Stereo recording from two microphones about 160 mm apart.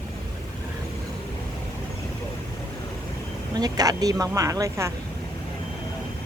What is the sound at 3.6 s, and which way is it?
Speech, 25° right (ahead or behind).